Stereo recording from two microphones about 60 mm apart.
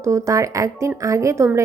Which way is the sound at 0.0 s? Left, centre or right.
Right.